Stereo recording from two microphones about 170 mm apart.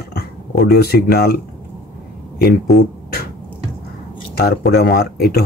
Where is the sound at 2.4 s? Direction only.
65° left (ahead or behind).